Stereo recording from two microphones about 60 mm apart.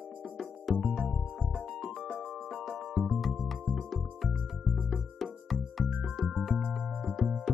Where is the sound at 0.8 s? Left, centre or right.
Centre.